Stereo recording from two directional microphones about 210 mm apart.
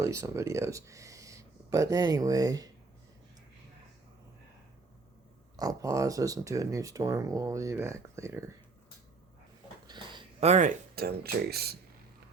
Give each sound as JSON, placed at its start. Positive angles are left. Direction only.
{"t": 0.0, "sound": "speech", "side_deg": -15}
{"t": 5.5, "sound": "speech", "side_deg": -15}
{"t": 9.8, "sound": "a sound", "side_deg": -20}
{"t": 10.9, "sound": "speech", "side_deg": -45}